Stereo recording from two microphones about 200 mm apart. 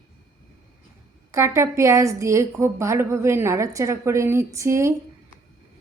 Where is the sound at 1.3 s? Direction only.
15° right (ahead or behind).